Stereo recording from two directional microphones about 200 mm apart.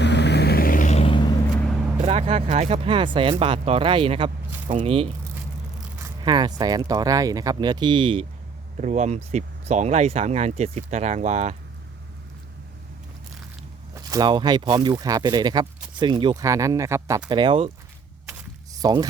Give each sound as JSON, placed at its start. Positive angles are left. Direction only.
{"t": 0.0, "sound": "vehicle", "side_deg": 60}
{"t": 2.0, "sound": "speech", "side_deg": -30}
{"t": 8.8, "sound": "speech", "side_deg": -35}
{"t": 14.1, "sound": "speech", "side_deg": -20}
{"t": 18.3, "sound": "a sound", "side_deg": -15}